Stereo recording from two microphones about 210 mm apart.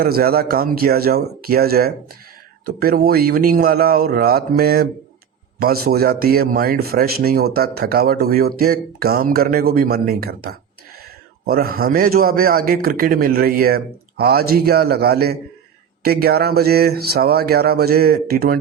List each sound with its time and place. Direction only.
0.0 s speech: 45° right (ahead or behind)